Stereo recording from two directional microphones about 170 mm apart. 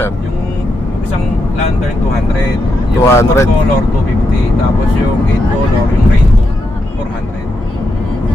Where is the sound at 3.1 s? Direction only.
15° left (ahead or behind).